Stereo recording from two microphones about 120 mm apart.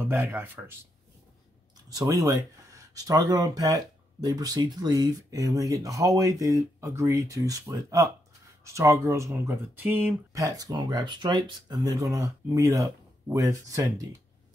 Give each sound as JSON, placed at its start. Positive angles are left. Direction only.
{"t": 0.0, "sound": "speech", "side_deg": -20}
{"t": 2.0, "sound": "speech", "side_deg": -30}
{"t": 10.3, "sound": "speech", "side_deg": -30}